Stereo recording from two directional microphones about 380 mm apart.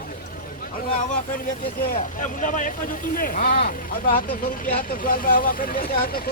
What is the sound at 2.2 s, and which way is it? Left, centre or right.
Speech, centre.